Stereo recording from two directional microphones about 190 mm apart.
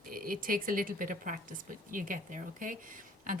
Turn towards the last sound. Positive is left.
turn(degrees=-45)  # may be behind; listen again after turning